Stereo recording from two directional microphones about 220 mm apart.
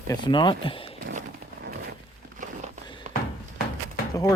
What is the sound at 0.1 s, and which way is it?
Speech, 20° left (ahead or behind).